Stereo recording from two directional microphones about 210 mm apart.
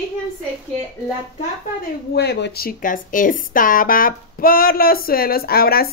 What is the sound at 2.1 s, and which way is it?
Speech, 50° left (ahead or behind).